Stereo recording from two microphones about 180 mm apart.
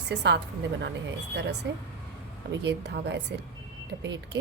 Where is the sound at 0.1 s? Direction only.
70° right (ahead or behind).